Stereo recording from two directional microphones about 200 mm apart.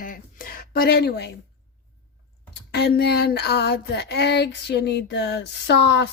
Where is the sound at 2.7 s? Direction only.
55° left (ahead or behind).